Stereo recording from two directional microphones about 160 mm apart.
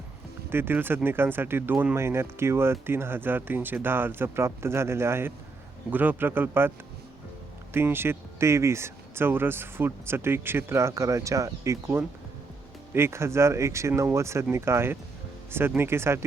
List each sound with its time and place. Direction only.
0.5 s speech: 15° right (ahead or behind)